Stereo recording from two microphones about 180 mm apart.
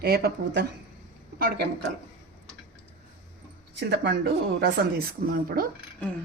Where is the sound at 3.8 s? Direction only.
70° right (ahead or behind); by 5.6 s 55° right (ahead or behind).